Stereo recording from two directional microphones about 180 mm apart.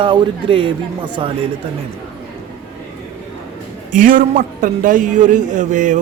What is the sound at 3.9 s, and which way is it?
A man's voice, 50° right (ahead or behind).